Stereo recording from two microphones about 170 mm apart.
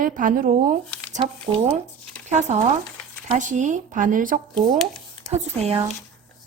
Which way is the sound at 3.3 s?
45° right (ahead or behind).